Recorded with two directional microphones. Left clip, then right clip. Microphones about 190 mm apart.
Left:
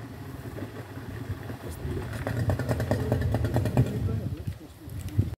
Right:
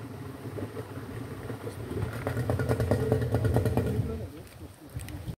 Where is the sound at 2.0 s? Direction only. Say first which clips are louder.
Even; 50° left (ahead or behind).